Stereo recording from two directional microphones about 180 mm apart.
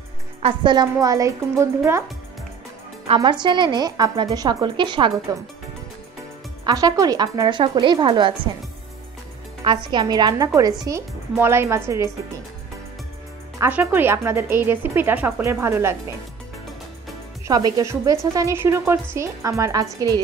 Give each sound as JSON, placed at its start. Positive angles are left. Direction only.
{"t": 0.4, "sound": "a woman's voice", "side_deg": -30}
{"t": 3.2, "sound": "a woman's voice", "side_deg": -25}
{"t": 6.6, "sound": "a woman's voice", "side_deg": -20}
{"t": 9.8, "sound": "a woman's voice", "side_deg": -25}
{"t": 13.6, "sound": "speech", "side_deg": -10}
{"t": 17.5, "sound": "speech", "side_deg": -20}